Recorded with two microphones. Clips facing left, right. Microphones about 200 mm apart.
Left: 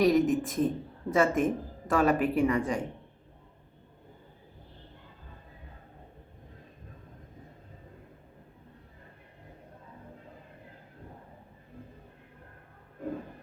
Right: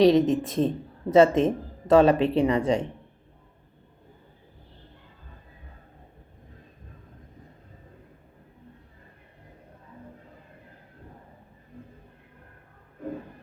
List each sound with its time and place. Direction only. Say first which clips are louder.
0.0 s speech: right 5 dB; 25° right (ahead or behind)